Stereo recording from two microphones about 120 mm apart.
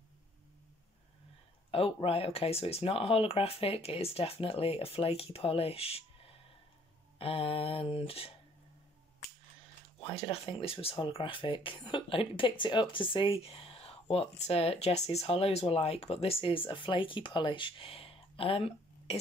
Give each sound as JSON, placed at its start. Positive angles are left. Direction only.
{"t": 1.7, "sound": "speech", "side_deg": 50}
{"t": 9.9, "sound": "speech", "side_deg": 45}